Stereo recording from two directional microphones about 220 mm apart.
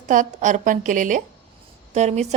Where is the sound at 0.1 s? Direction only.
35° right (ahead or behind).